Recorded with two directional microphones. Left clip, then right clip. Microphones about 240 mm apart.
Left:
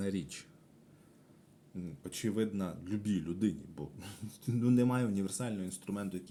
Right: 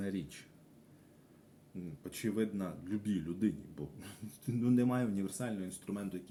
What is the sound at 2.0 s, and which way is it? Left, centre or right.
Speech, left.